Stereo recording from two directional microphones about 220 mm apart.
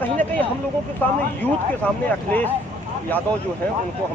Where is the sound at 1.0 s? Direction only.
10° left (ahead or behind).